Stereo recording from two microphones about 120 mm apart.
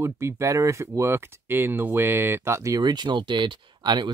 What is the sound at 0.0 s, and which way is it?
Speech, 20° right (ahead or behind).